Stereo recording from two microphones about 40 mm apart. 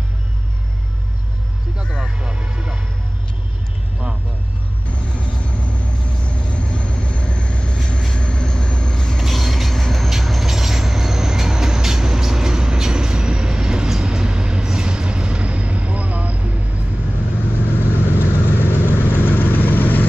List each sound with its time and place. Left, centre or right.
2.0 s vehicle: right
6.2 s vehicle: left
9.2 s train: centre; by 16.4 s right
18.0 s vehicle: left